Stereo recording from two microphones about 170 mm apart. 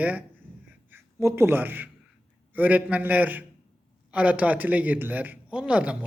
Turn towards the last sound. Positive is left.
turn(degrees=-5)  # may be behind; listen again after turning